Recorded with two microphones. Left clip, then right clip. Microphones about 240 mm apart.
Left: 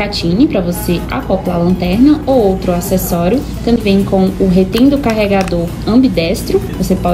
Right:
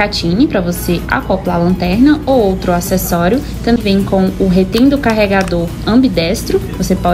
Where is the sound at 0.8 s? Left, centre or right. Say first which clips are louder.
Right 2 dB; right.